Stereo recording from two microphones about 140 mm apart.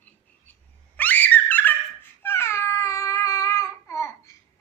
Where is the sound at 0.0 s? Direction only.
10° left (ahead or behind).